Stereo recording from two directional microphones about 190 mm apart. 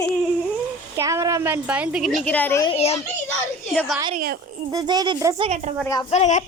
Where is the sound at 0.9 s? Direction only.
15° right (ahead or behind); by 2.6 s 10° left (ahead or behind).